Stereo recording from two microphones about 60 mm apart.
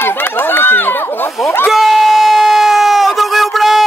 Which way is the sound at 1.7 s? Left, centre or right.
Centre.